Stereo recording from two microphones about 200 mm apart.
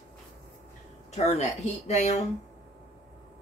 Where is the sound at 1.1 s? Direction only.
35° left (ahead or behind).